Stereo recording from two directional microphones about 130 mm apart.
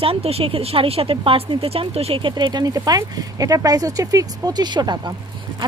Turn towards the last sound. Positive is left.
turn(degrees=-35)  # may be behind; listen again after turning